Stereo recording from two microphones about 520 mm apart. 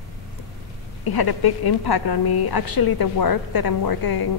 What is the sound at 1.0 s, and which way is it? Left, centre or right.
A woman's voice, left.